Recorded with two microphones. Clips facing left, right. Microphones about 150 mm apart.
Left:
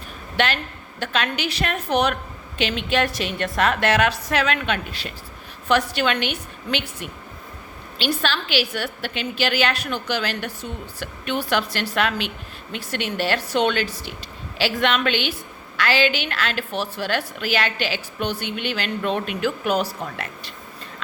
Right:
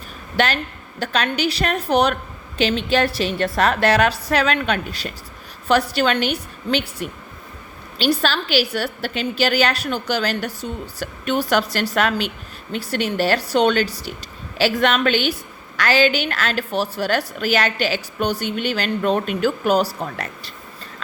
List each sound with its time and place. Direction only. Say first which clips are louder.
0.3 s a woman's voice: right 2 dB; 40° right (ahead or behind)